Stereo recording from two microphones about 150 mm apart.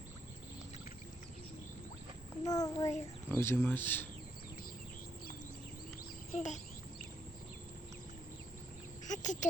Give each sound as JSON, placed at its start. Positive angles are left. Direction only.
{"t": 2.4, "sound": "a child's voice", "side_deg": 25}
{"t": 6.3, "sound": "speech", "side_deg": 55}
{"t": 9.0, "sound": "a sound", "side_deg": 55}